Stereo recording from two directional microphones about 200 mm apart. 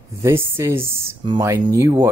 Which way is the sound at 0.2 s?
10° right (ahead or behind).